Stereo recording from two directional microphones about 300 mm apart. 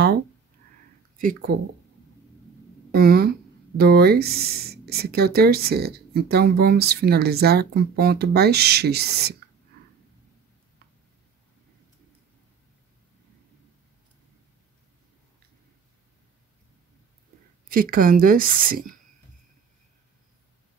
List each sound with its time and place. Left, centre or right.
1.1 s speech: right
2.9 s speech: right
17.6 s speech: right